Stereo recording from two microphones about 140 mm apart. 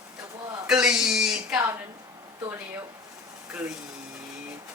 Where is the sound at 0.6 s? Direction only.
5° right (ahead or behind).